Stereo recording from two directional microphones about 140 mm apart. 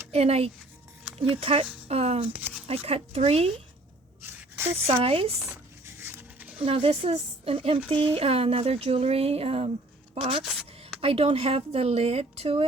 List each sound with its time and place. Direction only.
0.1 s speech: 45° right (ahead or behind)
2.3 s a sound: 5° right (ahead or behind)
2.6 s speech: 45° right (ahead or behind)
4.2 s a sound: 15° right (ahead or behind)
4.9 s speech: 40° right (ahead or behind)
5.5 s dog: 15° right (ahead or behind)
6.6 s speech: 40° right (ahead or behind)
10.4 s a sound: centre (ahead or behind)
11.0 s speech: 45° right (ahead or behind)